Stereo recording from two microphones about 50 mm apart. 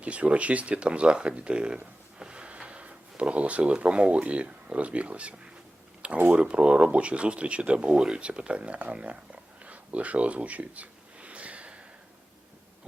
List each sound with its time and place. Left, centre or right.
0.0 s speech: right
2.1 s a sound: centre
3.7 s speech: right
6.3 s speech: right